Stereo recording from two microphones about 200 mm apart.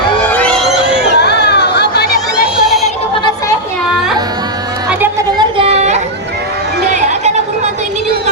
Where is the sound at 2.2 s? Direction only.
Centre (ahead or behind).